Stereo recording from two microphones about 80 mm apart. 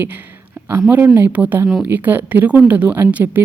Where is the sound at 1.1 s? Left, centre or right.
Right.